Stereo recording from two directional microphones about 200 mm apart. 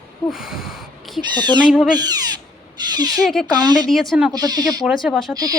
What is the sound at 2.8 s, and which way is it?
Owl, 20° right (ahead or behind).